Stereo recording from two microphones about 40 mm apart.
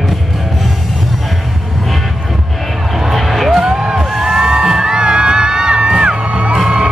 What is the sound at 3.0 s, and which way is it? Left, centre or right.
Music, centre.